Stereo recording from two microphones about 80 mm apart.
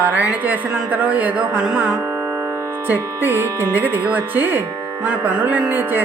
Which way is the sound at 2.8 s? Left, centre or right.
Right.